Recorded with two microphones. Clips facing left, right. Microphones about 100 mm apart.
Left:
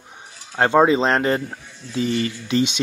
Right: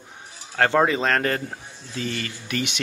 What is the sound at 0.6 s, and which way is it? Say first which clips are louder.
Speech: left 4 dB; 20° left (ahead or behind).